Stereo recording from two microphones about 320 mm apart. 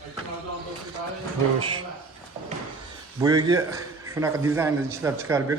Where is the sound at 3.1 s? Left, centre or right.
Centre.